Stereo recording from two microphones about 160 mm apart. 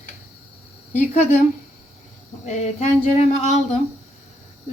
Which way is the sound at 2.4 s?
45° left (ahead or behind).